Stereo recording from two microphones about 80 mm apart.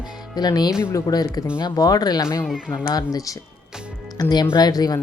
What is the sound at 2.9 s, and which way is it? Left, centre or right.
Speech, left.